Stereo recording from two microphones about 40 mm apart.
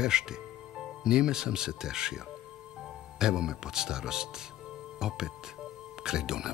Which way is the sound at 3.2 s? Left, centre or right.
Centre.